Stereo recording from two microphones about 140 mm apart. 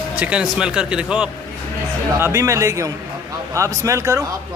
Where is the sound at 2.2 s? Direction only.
20° right (ahead or behind).